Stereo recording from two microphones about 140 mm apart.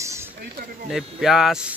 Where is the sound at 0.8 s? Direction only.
Centre (ahead or behind).